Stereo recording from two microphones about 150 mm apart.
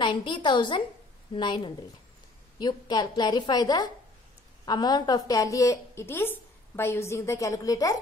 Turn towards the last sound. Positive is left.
turn(degrees=25)  # may be behind; listen again after turning